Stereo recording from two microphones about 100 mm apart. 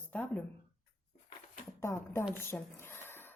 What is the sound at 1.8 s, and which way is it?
A woman's voice, 25° left (ahead or behind).